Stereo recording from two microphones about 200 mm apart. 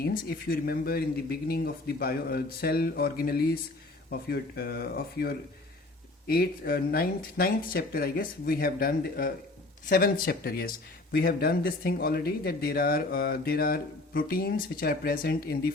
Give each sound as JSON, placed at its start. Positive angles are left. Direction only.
{"t": 0.0, "sound": "speech", "side_deg": 45}